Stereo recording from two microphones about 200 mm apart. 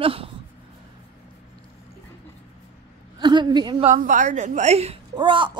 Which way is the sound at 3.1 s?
20° right (ahead or behind).